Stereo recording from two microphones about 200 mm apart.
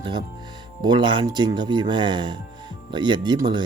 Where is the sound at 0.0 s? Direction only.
20° right (ahead or behind).